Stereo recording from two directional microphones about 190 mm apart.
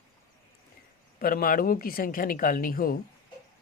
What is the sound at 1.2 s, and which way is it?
Speech, 50° left (ahead or behind).